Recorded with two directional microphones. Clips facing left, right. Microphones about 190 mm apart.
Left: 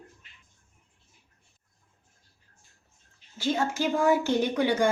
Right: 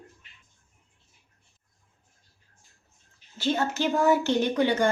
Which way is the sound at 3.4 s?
10° left (ahead or behind).